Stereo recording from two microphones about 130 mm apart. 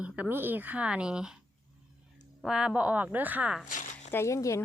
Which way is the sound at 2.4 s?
5° right (ahead or behind).